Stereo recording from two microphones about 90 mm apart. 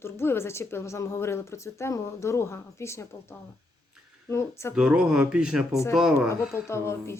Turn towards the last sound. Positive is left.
turn(degrees=30)  # may be behind; listen again after turning